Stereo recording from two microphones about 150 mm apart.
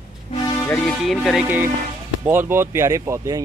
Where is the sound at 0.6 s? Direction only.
5° left (ahead or behind).